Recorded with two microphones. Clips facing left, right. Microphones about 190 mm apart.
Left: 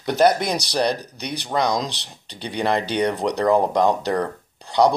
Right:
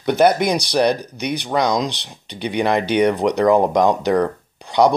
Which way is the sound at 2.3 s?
65° right (ahead or behind).